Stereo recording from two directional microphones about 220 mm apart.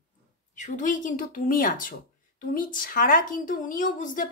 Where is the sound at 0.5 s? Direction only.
35° left (ahead or behind).